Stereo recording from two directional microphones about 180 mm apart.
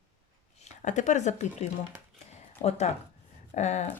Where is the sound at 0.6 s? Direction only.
40° left (ahead or behind).